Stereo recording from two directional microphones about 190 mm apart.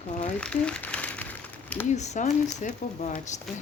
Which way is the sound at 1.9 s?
35° left (ahead or behind).